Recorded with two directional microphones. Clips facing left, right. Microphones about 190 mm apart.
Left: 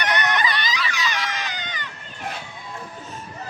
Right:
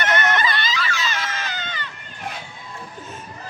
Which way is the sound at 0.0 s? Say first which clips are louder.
Right 2 dB; 15° left (ahead or behind).